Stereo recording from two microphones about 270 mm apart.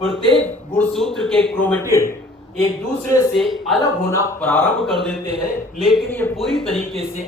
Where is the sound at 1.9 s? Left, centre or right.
Centre.